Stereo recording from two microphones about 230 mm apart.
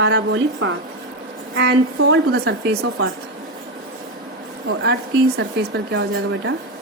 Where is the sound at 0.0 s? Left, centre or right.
Right.